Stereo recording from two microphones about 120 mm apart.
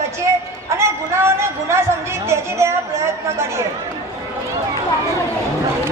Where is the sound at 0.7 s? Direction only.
25° right (ahead or behind).